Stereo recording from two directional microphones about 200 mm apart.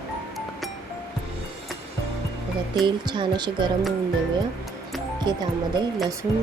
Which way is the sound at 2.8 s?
20° right (ahead or behind).